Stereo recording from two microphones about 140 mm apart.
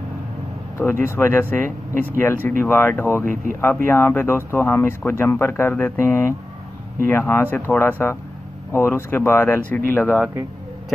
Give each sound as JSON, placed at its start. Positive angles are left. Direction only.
{"t": 0.7, "sound": "speech", "side_deg": 15}